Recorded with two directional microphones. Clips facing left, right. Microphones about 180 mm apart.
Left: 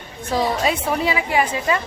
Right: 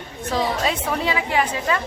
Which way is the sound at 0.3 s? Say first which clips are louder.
Left 2 dB; 10° left (ahead or behind).